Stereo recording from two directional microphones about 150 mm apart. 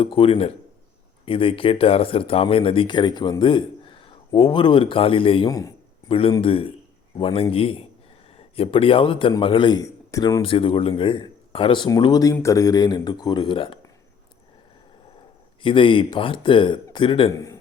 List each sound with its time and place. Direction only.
0.0 s speech: 40° left (ahead or behind)
5.5 s speech: 25° left (ahead or behind)
6.1 s speech: 40° left (ahead or behind); by 10.4 s 20° left (ahead or behind)
10.4 s speech: 35° left (ahead or behind)
15.6 s speech: 35° left (ahead or behind)
17.3 s speech: 20° left (ahead or behind)